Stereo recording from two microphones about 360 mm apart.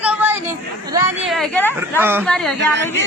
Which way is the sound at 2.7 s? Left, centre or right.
Right.